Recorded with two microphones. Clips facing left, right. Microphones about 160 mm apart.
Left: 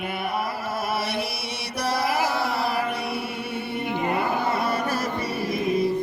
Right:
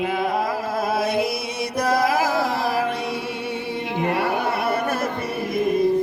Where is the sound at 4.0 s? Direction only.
80° right.